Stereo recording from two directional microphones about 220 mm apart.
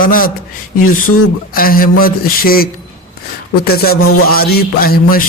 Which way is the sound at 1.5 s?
40° left (ahead or behind).